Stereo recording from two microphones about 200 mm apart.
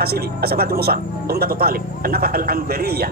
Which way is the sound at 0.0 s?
50° right (ahead or behind).